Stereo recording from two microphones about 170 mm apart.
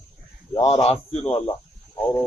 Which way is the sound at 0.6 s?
35° left (ahead or behind).